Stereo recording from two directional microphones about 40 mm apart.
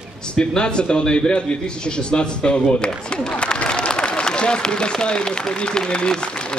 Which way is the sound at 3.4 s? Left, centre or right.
Left.